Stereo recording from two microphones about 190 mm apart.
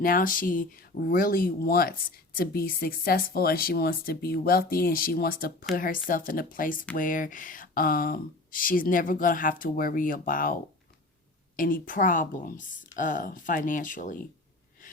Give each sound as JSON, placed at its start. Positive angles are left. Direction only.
{"t": 0.0, "sound": "speech", "side_deg": 50}